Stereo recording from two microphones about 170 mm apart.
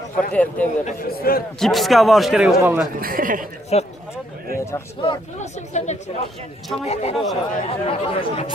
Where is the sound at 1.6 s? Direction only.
Centre (ahead or behind).